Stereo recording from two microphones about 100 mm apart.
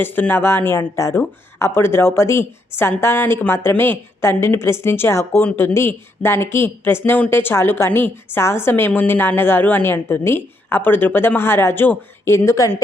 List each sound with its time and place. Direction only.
0.0 s speech: 20° left (ahead or behind)